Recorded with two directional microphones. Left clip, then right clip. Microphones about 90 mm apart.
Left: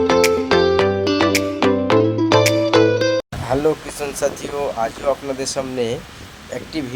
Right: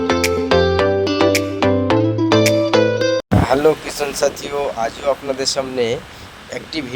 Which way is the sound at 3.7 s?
30° right (ahead or behind).